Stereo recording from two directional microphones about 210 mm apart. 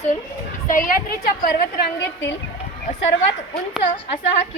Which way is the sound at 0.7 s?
40° left (ahead or behind).